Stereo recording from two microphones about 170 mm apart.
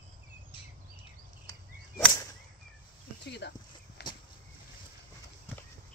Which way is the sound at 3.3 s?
80° left.